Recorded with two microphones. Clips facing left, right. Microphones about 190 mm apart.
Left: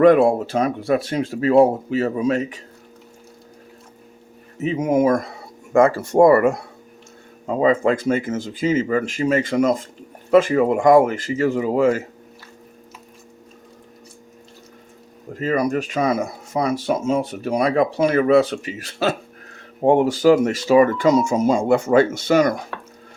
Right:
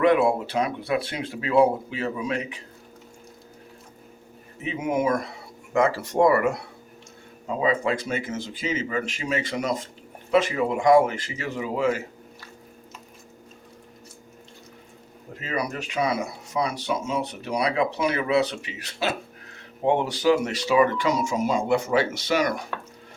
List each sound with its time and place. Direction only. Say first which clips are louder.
0.0 s speech: left 7 dB; 45° left (ahead or behind)
4.6 s speech: left 7 dB; 45° left (ahead or behind)
15.4 s speech: left 9 dB; 45° left (ahead or behind)